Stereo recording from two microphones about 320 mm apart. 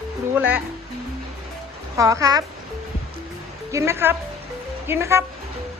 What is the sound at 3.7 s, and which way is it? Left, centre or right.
A woman's voice, centre.